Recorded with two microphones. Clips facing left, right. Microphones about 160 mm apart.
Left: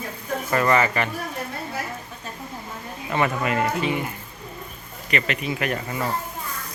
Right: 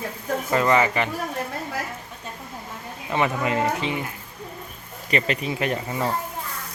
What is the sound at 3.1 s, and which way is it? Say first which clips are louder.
Speech: even; 20° right (ahead or behind).